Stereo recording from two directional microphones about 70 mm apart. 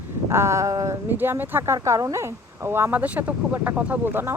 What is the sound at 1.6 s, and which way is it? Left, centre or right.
Speech, right.